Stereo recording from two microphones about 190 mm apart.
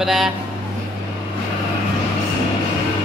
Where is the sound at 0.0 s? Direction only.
Centre (ahead or behind).